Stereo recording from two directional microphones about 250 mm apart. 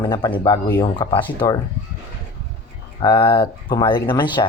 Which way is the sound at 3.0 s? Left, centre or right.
Centre.